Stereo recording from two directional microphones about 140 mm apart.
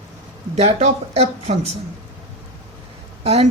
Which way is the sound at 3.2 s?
45° right (ahead or behind).